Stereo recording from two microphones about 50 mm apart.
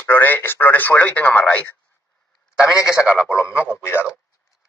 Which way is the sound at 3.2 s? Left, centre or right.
Left.